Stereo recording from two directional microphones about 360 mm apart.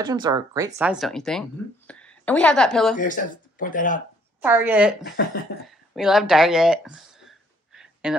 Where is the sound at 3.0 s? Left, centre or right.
Left.